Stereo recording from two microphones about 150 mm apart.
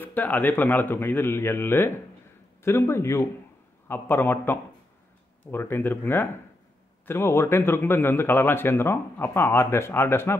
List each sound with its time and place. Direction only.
0.0 s speech: 10° left (ahead or behind)